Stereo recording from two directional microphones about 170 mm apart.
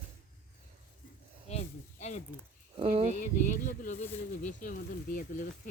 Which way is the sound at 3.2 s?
50° left (ahead or behind).